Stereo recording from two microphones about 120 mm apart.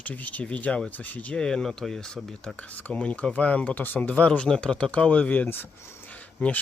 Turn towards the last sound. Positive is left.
turn(degrees=15)  # may be behind; listen again after turning